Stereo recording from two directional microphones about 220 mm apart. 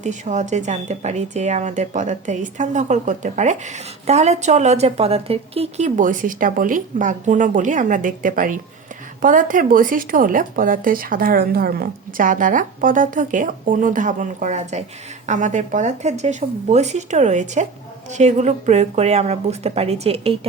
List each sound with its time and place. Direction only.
0.0 s a woman's voice: 30° right (ahead or behind)